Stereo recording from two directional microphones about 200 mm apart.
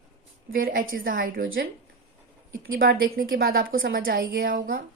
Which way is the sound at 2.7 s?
45° right (ahead or behind).